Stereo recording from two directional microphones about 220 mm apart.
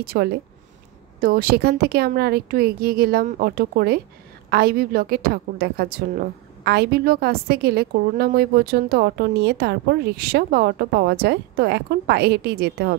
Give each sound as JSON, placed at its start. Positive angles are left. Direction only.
{"t": 0.0, "sound": "a woman's voice", "side_deg": -45}